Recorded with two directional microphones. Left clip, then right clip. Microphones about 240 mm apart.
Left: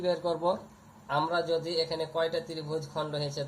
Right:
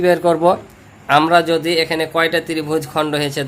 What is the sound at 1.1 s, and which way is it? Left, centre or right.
A man's voice, right.